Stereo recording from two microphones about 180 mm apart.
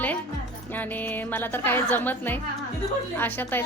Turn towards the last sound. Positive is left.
turn(degrees=10)  # may be behind; listen again after turning